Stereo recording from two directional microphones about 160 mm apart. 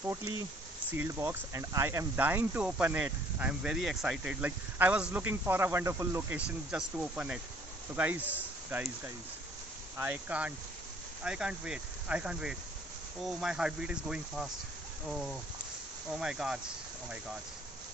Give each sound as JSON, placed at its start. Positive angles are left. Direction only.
{"t": 0.0, "sound": "speech", "side_deg": -15}
{"t": 6.7, "sound": "speech", "side_deg": -5}
{"t": 10.0, "sound": "speech", "side_deg": -10}